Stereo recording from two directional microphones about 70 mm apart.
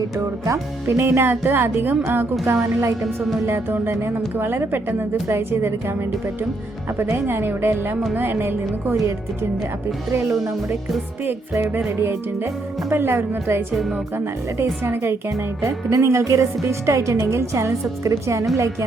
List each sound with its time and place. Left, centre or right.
0.2 s a woman's voice: right
0.9 s speech: right
3.4 s a woman's voice: right
7.0 s a woman's voice: right
11.9 s a woman's voice: right
14.6 s a woman's voice: right